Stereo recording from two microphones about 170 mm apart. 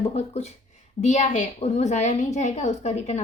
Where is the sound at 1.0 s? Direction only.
45° left (ahead or behind).